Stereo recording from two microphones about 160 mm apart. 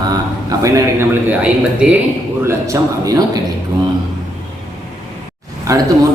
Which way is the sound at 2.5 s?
20° right (ahead or behind).